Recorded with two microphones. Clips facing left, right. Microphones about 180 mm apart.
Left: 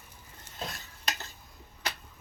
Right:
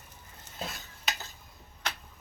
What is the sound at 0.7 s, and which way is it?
Stir, centre (ahead or behind).